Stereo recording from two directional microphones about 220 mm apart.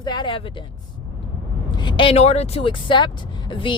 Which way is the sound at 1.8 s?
20° left (ahead or behind).